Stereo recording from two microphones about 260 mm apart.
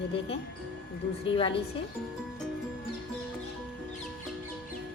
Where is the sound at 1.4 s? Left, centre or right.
Centre.